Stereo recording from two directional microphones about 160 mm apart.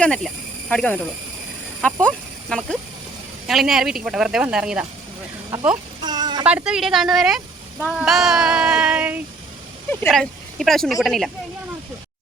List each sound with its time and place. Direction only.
0.0 s speech: 5° left (ahead or behind)
6.1 s a sound: 25° right (ahead or behind)
6.4 s speech: 10° right (ahead or behind)